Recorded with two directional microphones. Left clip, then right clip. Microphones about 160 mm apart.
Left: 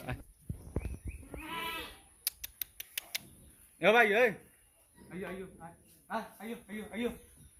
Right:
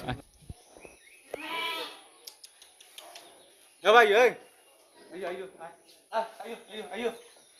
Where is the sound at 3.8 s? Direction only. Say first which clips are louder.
Right 6 dB; 90° right.